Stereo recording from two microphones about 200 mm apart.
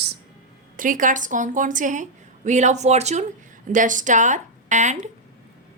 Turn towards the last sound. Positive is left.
turn(degrees=-35)  # may be behind; listen again after turning